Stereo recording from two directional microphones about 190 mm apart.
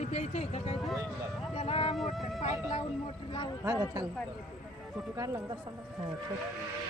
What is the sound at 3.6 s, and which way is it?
Speech, 20° right (ahead or behind).